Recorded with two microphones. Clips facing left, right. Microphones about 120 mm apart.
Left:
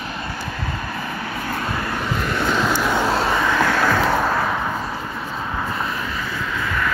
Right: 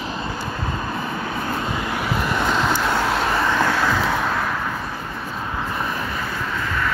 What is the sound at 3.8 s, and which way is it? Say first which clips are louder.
Vehicle: left 3 dB; centre (ahead or behind).